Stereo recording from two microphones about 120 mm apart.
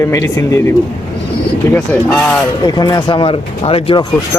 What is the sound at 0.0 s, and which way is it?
Speech, 25° left (ahead or behind).